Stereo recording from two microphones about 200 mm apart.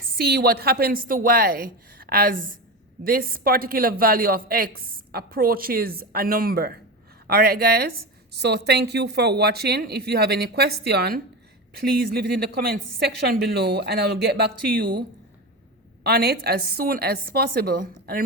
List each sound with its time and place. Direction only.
0.2 s a woman's voice: 50° right (ahead or behind)
16.0 s a woman's voice: 50° right (ahead or behind)